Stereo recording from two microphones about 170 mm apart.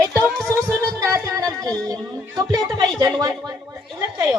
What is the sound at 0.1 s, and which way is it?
Music, 5° left (ahead or behind).